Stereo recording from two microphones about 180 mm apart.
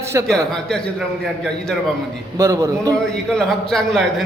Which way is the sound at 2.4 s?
15° right (ahead or behind).